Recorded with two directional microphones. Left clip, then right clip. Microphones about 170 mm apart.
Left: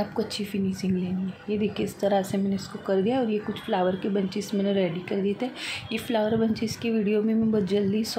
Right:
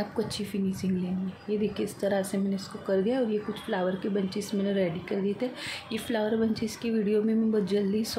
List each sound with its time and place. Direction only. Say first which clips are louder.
0.2 s speech: left 2 dB; 10° left (ahead or behind)